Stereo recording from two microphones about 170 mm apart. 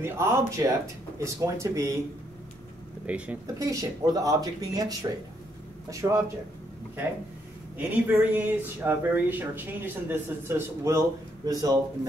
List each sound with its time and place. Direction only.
0.0 s speech: 15° right (ahead or behind)
3.1 s speech: 10° right (ahead or behind)
3.5 s speech: 20° right (ahead or behind)
7.7 s speech: 10° right (ahead or behind)